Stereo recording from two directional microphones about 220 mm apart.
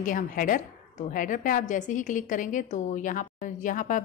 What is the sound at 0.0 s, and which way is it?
A woman's voice, 35° left (ahead or behind).